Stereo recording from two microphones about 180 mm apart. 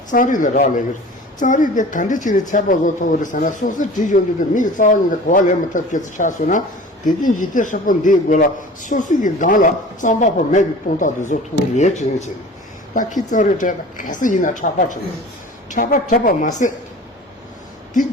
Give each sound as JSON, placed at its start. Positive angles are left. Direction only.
{"t": 0.1, "sound": "a man's voice", "side_deg": 45}